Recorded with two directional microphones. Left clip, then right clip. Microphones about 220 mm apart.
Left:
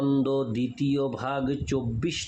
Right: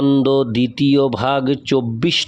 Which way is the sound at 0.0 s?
40° right (ahead or behind).